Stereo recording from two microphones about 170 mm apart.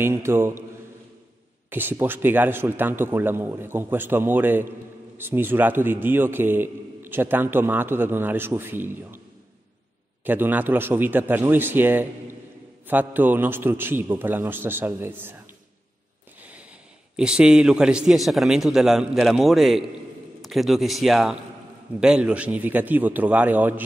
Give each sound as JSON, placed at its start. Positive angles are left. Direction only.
{"t": 0.0, "sound": "a man's voice", "side_deg": -15}
{"t": 1.7, "sound": "a man's voice", "side_deg": -10}
{"t": 10.2, "sound": "a man's voice", "side_deg": -10}
{"t": 17.2, "sound": "a man's voice", "side_deg": -5}